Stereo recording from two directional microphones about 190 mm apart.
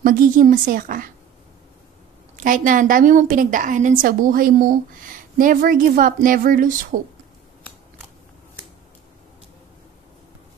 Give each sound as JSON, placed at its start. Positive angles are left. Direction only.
{"t": 0.0, "sound": "a woman's voice", "side_deg": -45}
{"t": 2.3, "sound": "a woman's voice", "side_deg": -45}